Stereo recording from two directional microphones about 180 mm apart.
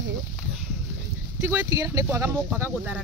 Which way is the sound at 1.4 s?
15° right (ahead or behind).